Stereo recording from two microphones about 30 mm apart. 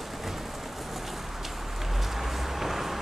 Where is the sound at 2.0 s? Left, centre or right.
Centre.